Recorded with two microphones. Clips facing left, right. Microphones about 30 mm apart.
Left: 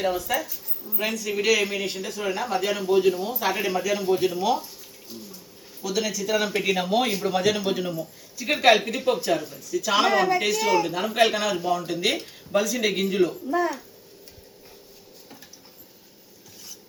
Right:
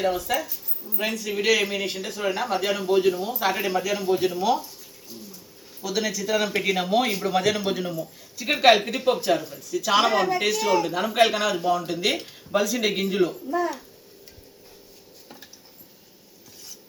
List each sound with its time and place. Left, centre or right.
0.0 s speech: centre
5.8 s speech: centre